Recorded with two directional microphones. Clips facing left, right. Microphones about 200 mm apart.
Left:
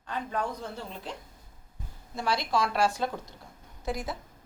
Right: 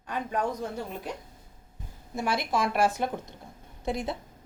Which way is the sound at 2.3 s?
20° right (ahead or behind).